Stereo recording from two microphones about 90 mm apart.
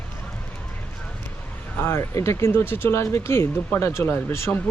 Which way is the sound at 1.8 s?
30° left (ahead or behind).